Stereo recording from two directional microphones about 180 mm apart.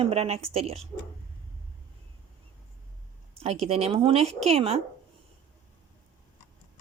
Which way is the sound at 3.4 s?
35° right (ahead or behind).